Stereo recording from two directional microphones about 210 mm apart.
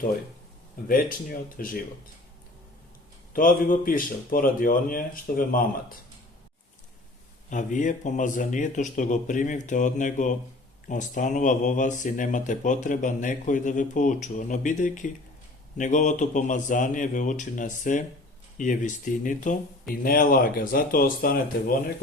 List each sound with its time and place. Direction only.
0.9 s speech: 40° left (ahead or behind)
3.3 s speech: 40° left (ahead or behind)
7.5 s speech: 35° left (ahead or behind)